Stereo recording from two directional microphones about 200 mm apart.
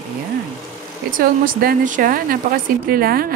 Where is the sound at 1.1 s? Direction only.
45° right (ahead or behind).